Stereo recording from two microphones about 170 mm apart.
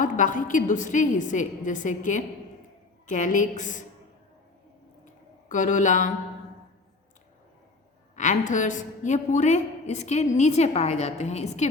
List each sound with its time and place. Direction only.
0.0 s a woman's voice: 50° left (ahead or behind)
5.5 s a woman's voice: 50° left (ahead or behind)
8.1 s a woman's voice: 45° left (ahead or behind)